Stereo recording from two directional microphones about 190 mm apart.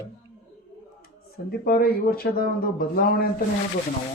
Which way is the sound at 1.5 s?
50° left (ahead or behind).